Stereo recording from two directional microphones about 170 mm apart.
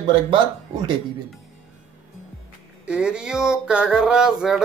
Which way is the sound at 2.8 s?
5° right (ahead or behind).